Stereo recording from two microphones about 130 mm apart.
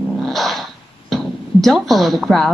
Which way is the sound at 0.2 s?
Centre (ahead or behind).